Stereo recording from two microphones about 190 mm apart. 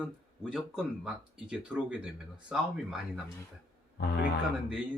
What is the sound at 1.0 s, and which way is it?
Speech, 5° right (ahead or behind).